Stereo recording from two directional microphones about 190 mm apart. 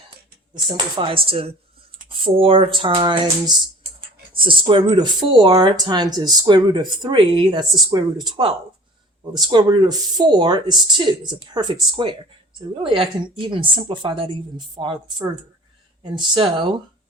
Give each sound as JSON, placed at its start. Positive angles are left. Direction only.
{"t": 0.9, "sound": "speech", "side_deg": -25}